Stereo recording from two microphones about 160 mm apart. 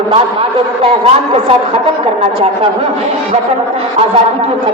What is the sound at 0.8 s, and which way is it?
Speech, 35° right (ahead or behind).